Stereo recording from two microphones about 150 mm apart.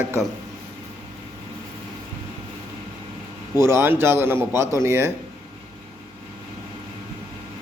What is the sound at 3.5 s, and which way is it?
A man's voice, 15° right (ahead or behind).